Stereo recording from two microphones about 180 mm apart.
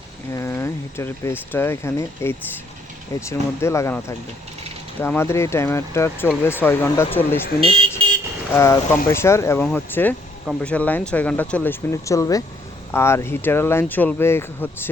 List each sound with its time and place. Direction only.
0.3 s speech: 15° left (ahead or behind)
7.6 s speech: 30° right (ahead or behind)
8.5 s speech: 15° left (ahead or behind)